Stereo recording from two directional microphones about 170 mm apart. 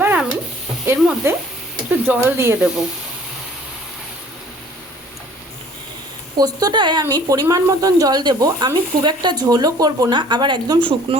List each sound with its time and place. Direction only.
0.0 s stir: 10° right (ahead or behind)
0.9 s speech: 15° right (ahead or behind)
6.3 s speech: 25° right (ahead or behind)